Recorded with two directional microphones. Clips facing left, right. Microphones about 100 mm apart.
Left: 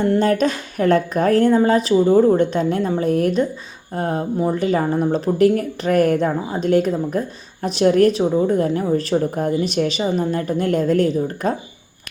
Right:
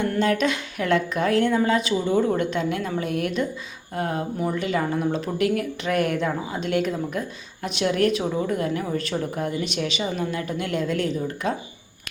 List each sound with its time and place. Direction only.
0.2 s speech: 40° left (ahead or behind)